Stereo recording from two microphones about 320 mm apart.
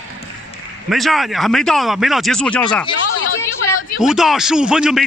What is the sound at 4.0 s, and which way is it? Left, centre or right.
Speech, centre.